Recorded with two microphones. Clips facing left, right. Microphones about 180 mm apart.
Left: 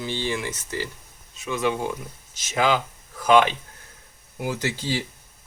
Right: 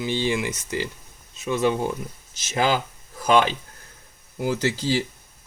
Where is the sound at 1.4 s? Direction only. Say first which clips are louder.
Right 3 dB; 25° right (ahead or behind).